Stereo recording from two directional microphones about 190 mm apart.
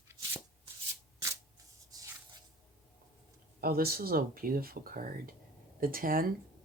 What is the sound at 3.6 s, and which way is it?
Speech, 55° right (ahead or behind).